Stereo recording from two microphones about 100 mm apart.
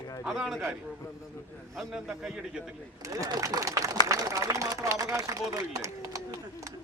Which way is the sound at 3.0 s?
35° right (ahead or behind).